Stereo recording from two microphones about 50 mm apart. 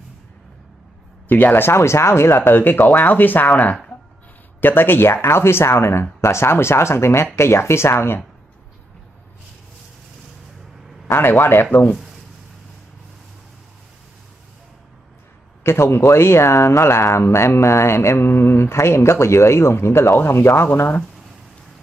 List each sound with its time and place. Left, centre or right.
1.3 s speech: left
1.8 s speech: left
2.5 s speech: left
4.6 s speech: left
11.1 s speech: left
15.6 s speech: left
20.2 s speech: left